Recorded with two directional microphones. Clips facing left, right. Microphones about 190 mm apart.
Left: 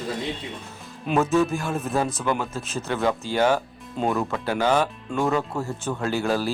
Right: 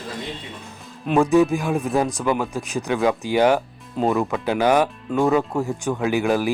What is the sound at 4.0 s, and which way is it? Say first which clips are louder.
Speech: right 4 dB; 5° right (ahead or behind).